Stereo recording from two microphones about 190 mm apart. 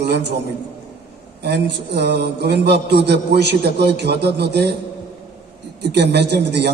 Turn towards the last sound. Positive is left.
turn(degrees=-60)  # may be behind; listen again after turning